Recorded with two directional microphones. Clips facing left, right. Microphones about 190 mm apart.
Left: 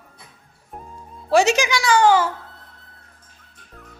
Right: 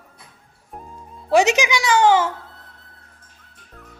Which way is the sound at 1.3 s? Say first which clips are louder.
Even; 20° right (ahead or behind).